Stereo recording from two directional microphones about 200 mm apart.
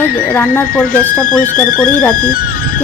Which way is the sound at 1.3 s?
45° left (ahead or behind).